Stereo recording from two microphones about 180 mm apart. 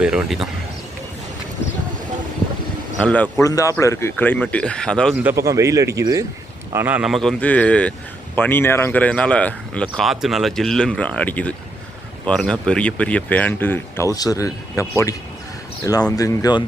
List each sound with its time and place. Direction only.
0.0 s speech: 5° right (ahead or behind)
3.0 s speech: 5° left (ahead or behind)
3.4 s speech: 20° left (ahead or behind)
5.1 s a man's voice: 10° right (ahead or behind); by 16.6 s 20° left (ahead or behind)